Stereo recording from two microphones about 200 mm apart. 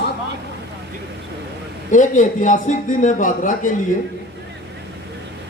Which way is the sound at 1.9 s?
40° left (ahead or behind).